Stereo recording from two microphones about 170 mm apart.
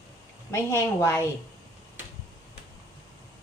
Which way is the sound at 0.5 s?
15° left (ahead or behind).